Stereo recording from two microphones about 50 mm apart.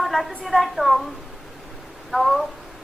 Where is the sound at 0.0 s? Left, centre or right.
Centre.